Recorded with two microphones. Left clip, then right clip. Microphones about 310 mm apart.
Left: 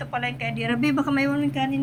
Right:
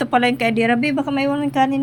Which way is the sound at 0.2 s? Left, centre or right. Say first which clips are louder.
Right 9 dB; centre.